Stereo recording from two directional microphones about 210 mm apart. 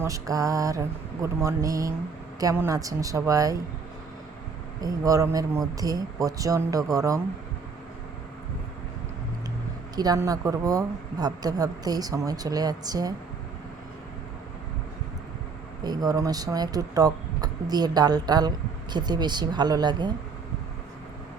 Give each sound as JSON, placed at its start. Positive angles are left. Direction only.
{"t": 0.0, "sound": "a woman's voice", "side_deg": -15}
{"t": 4.8, "sound": "a woman's voice", "side_deg": -15}
{"t": 9.9, "sound": "a woman's voice", "side_deg": -20}
{"t": 15.8, "sound": "speech", "side_deg": -20}